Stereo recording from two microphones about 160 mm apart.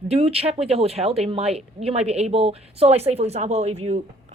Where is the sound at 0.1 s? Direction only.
40° right (ahead or behind).